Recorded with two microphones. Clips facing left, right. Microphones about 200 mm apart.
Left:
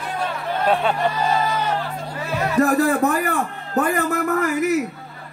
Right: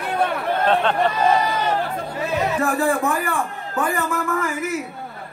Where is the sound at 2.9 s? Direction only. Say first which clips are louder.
Left 2 dB; 40° left (ahead or behind).